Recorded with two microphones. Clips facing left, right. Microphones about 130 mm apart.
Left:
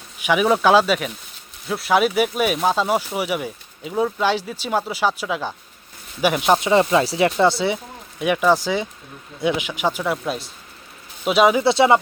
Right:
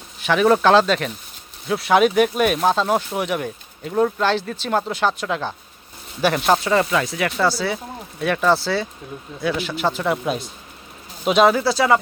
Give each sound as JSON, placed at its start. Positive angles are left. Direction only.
{"t": 0.2, "sound": "speech", "side_deg": 10}
{"t": 10.0, "sound": "speech", "side_deg": 0}
{"t": 11.6, "sound": "speech", "side_deg": 25}